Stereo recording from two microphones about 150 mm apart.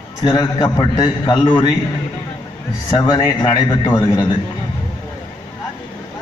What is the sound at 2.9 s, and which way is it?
A man's voice, 25° left (ahead or behind).